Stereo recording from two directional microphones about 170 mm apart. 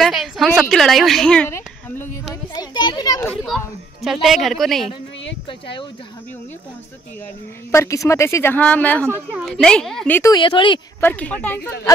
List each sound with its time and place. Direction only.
0.0 s a woman's voice: centre (ahead or behind)
2.5 s a child's voice: 25° left (ahead or behind)
3.2 s a child's voice: 5° left (ahead or behind)
5.5 s speech: 30° left (ahead or behind)
7.7 s a woman's voice: 15° left (ahead or behind)
10.3 s a child's voice: 30° left (ahead or behind)
11.0 s a woman's voice: 10° left (ahead or behind)